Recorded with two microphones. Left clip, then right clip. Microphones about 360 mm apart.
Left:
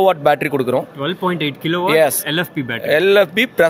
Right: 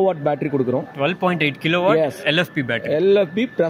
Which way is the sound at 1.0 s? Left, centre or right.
Centre.